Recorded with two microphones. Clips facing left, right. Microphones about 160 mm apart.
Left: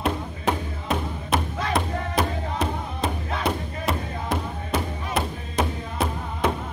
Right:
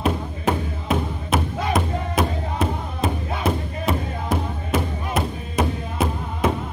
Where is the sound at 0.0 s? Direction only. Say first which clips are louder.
Right 3 dB; centre (ahead or behind).